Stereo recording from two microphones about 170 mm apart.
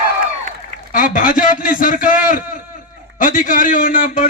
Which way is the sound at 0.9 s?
55° left (ahead or behind).